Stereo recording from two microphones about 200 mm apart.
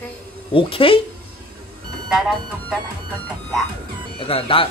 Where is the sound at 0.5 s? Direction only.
25° left (ahead or behind).